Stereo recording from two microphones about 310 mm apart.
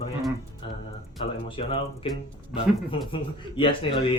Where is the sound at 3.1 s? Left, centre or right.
Centre.